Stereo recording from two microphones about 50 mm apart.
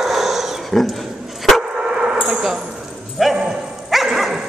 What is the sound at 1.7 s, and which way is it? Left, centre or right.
Dog, centre.